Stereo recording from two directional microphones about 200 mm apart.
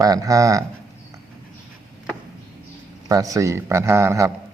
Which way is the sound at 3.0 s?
15° right (ahead or behind).